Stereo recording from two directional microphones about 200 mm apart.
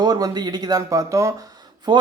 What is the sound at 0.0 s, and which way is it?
Speech, 20° right (ahead or behind).